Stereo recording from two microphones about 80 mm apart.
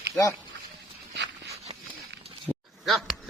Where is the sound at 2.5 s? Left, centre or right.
Left.